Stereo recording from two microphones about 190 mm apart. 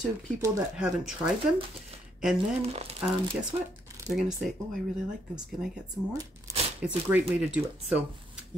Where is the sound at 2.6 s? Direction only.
35° right (ahead or behind).